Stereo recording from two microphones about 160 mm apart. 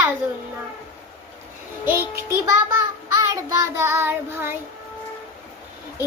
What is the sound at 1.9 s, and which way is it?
Child singing, 15° right (ahead or behind).